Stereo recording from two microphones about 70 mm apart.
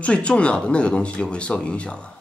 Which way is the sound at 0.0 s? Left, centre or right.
Centre.